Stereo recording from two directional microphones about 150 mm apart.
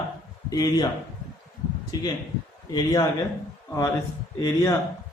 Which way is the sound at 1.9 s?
25° left (ahead or behind).